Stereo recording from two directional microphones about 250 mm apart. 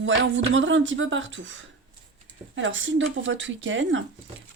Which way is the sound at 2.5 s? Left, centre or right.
Right.